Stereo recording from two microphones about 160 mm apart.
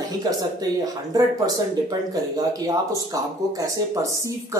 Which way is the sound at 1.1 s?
25° right (ahead or behind).